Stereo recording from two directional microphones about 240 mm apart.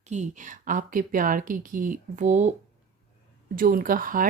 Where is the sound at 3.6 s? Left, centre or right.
Right.